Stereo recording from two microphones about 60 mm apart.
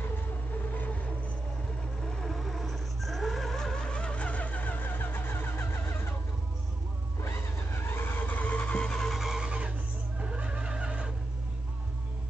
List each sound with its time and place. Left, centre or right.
0.7 s vehicle: left
2.0 s vehicle: centre; by 6.1 s left
7.2 s vehicle: left; by 9.2 s centre
9.2 s vehicle: centre